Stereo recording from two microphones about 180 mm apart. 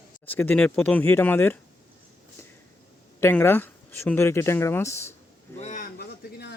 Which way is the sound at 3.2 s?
10° left (ahead or behind).